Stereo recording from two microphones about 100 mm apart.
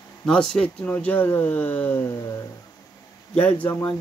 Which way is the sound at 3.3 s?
20° left (ahead or behind).